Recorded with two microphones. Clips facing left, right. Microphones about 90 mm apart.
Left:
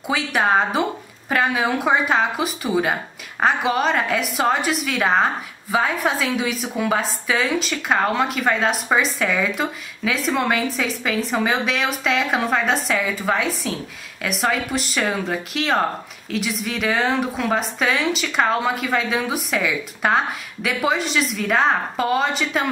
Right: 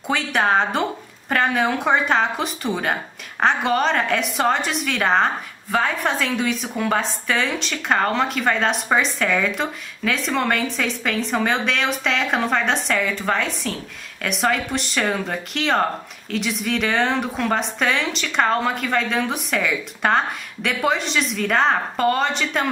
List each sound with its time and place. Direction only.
0.0 s speech: 5° left (ahead or behind)